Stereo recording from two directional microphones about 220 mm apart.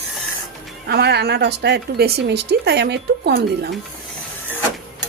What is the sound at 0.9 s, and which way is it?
Speech, 50° right (ahead or behind).